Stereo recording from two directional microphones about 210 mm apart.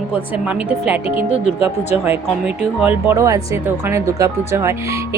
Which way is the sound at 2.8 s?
15° right (ahead or behind).